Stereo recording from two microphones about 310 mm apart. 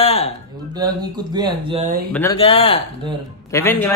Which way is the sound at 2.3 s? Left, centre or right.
Centre.